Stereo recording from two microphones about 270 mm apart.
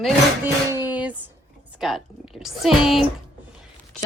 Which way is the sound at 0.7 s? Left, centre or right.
Centre.